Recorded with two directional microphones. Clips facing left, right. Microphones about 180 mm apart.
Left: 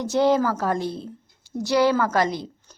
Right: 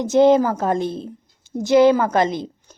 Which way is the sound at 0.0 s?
20° right (ahead or behind).